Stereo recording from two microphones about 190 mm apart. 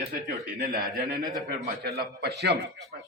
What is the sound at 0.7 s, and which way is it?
A man's voice, 55° right (ahead or behind).